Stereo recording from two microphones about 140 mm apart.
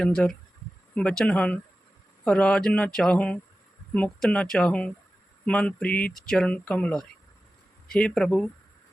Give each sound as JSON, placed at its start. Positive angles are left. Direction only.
{"t": 0.0, "sound": "speech", "side_deg": 5}